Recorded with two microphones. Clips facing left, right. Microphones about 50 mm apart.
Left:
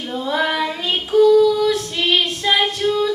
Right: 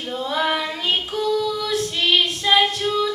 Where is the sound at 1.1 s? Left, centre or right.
Left.